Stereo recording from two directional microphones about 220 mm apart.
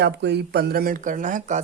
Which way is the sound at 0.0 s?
50° right (ahead or behind).